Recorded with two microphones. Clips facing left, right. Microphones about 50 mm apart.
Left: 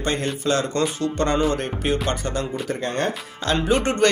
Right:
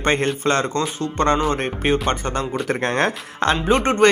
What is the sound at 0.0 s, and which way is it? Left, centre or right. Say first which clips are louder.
Speech: right 5 dB; right.